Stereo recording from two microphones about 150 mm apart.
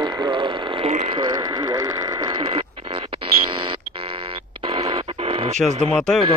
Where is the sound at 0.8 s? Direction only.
45° right (ahead or behind).